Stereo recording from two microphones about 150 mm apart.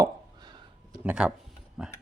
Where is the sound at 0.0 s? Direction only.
30° right (ahead or behind).